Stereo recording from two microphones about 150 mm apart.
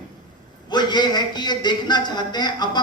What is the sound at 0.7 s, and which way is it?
A man's voice, 30° left (ahead or behind).